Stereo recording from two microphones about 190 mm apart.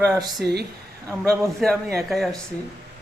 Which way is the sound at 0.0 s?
20° right (ahead or behind).